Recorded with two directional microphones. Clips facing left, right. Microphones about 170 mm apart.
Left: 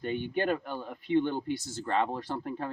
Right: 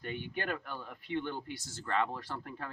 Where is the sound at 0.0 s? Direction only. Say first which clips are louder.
Left 8 dB; 25° left (ahead or behind).